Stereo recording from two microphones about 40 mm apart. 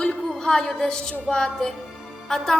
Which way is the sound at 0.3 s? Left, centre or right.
Centre.